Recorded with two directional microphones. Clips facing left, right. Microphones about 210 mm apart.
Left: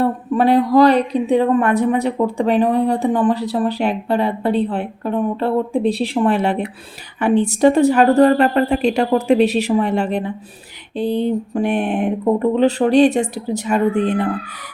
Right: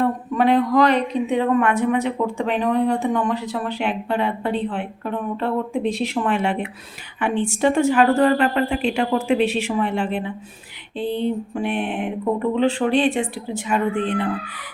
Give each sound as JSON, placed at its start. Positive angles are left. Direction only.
{"t": 0.0, "sound": "speech", "side_deg": 35}